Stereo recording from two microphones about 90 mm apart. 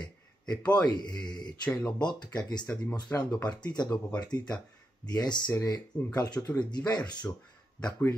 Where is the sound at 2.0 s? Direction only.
55° left (ahead or behind).